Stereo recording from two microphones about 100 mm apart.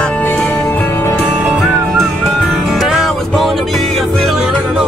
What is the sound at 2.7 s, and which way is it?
Music, centre (ahead or behind).